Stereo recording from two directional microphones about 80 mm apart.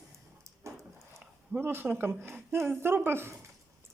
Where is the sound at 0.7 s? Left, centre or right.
Right.